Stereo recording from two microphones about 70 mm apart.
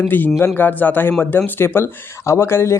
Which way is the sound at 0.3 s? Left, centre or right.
Left.